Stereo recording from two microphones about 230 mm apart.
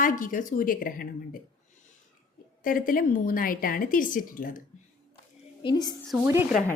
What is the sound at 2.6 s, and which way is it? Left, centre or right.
A woman's voice, left.